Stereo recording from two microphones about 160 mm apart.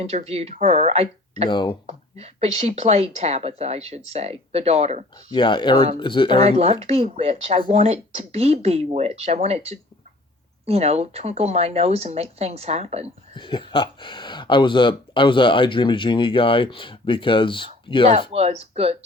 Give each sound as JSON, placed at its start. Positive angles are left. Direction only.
{"t": 0.0, "sound": "speech", "side_deg": -40}
{"t": 1.5, "sound": "speech", "side_deg": 30}
{"t": 1.9, "sound": "speech", "side_deg": -40}
{"t": 5.3, "sound": "speech", "side_deg": 30}
{"t": 6.4, "sound": "speech", "side_deg": -40}
{"t": 13.3, "sound": "speech", "side_deg": 30}
{"t": 18.3, "sound": "speech", "side_deg": -40}